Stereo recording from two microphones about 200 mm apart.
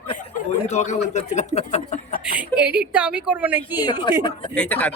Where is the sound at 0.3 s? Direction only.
35° left (ahead or behind).